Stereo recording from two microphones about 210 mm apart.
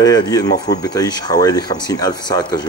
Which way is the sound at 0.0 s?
20° left (ahead or behind).